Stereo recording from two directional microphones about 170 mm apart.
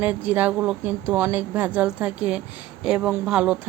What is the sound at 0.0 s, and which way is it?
A woman's voice, 10° right (ahead or behind).